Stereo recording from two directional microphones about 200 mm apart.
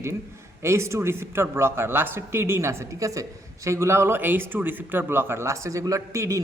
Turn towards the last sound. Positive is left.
turn(degrees=-15)  # may be behind; listen again after turning